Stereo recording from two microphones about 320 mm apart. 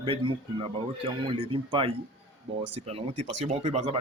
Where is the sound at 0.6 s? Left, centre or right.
Centre.